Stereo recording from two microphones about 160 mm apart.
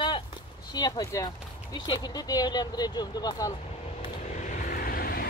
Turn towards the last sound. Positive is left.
turn(degrees=65)  # may be behind; listen again after turning